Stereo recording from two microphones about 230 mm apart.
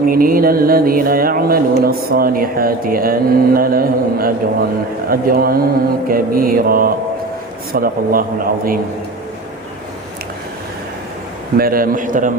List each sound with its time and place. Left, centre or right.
0.1 s speech: right
11.5 s speech: right